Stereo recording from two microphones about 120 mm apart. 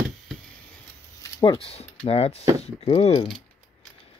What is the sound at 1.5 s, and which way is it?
Speech, 55° left (ahead or behind).